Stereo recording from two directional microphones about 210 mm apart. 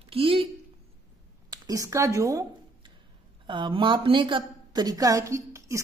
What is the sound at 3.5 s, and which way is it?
A woman's voice, 25° right (ahead or behind).